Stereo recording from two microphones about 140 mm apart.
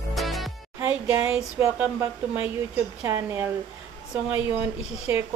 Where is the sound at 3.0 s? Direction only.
20° right (ahead or behind).